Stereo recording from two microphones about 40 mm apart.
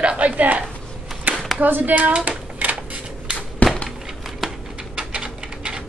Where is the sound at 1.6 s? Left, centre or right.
Right.